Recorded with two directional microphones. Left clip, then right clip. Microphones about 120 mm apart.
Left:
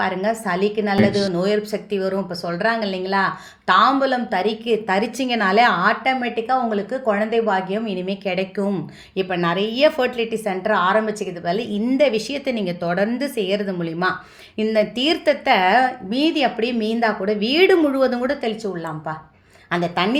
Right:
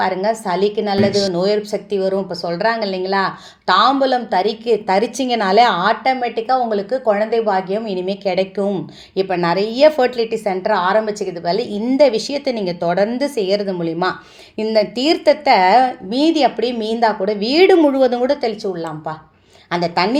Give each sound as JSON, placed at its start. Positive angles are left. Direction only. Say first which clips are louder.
{"t": 0.2, "sound": "a woman's voice", "louder": "right 3 dB", "side_deg": -30}